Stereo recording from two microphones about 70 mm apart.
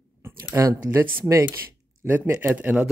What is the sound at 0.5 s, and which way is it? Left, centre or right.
Speech, right.